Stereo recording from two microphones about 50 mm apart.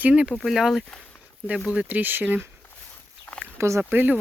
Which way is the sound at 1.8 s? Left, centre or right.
Right.